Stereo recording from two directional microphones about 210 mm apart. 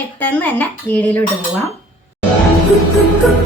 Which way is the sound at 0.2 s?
10° left (ahead or behind).